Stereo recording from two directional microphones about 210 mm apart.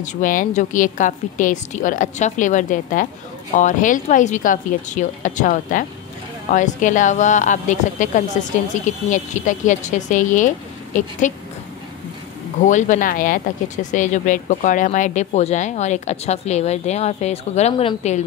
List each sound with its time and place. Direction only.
0.0 s a woman's voice: 40° left (ahead or behind)
12.6 s a woman's voice: 35° left (ahead or behind)